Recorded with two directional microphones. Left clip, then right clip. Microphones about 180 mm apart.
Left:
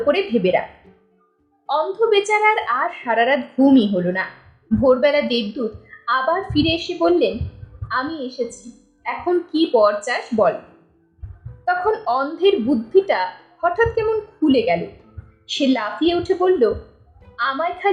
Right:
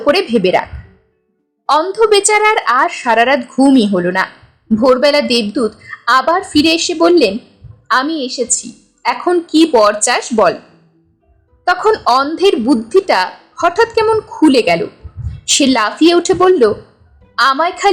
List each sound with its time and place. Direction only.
0.0 s speech: 35° right (ahead or behind)
1.6 s speech: 40° right (ahead or behind)
11.6 s speech: 40° right (ahead or behind)